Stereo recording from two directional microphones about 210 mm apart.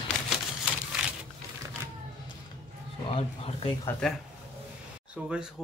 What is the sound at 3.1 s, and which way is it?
Speech, 25° left (ahead or behind).